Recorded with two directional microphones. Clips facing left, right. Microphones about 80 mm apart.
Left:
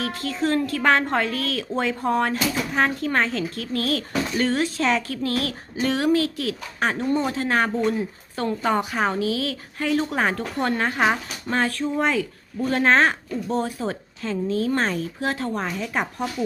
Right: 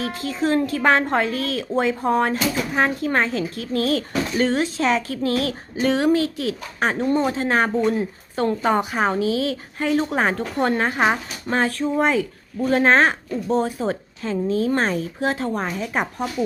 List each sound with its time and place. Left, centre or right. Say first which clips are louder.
0.0 s a woman's voice: right 1 dB; right